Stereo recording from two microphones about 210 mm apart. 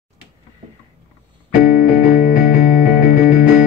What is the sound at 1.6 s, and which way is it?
Music, 40° left (ahead or behind).